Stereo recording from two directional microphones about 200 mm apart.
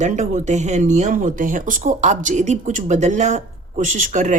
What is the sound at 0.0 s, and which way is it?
Speech, 35° right (ahead or behind).